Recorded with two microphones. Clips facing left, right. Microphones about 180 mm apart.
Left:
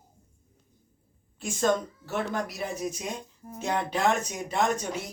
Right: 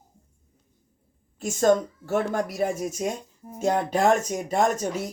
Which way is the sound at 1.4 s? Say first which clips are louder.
Right 5 dB; 45° right (ahead or behind).